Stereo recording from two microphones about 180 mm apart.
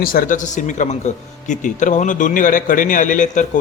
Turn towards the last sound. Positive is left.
turn(degrees=45)  # may be behind; listen again after turning